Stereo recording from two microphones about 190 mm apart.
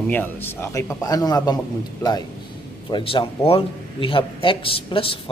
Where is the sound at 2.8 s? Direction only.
25° left (ahead or behind).